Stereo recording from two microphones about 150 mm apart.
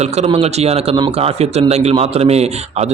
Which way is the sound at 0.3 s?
45° right (ahead or behind).